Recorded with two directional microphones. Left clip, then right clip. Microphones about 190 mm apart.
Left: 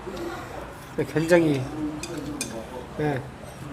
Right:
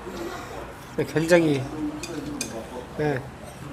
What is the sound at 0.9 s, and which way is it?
Speech, centre (ahead or behind).